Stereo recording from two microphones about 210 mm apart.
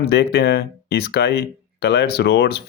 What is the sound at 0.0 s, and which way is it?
Speech, 50° left (ahead or behind).